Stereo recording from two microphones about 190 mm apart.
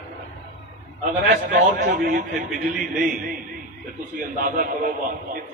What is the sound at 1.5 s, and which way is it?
Speech, 55° right (ahead or behind).